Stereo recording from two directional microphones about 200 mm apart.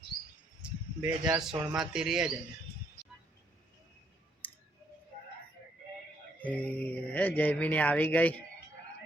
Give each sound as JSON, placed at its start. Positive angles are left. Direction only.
{"t": 0.1, "sound": "a sound", "side_deg": 50}
{"t": 0.6, "sound": "speech", "side_deg": -5}
{"t": 4.4, "sound": "scissors", "side_deg": 10}
{"t": 6.4, "sound": "speech", "side_deg": 5}